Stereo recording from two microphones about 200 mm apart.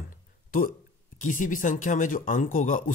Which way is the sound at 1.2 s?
40° left (ahead or behind).